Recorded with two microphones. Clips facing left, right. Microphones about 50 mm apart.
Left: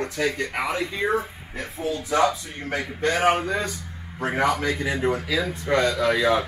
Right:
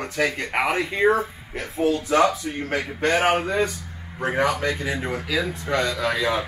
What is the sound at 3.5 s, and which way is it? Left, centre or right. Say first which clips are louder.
Speech: right 3 dB; centre.